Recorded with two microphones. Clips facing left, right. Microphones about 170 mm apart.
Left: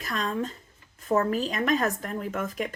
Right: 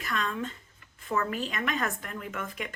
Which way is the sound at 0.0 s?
40° left (ahead or behind).